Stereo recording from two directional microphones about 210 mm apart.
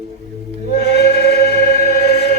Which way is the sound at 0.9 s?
50° left (ahead or behind).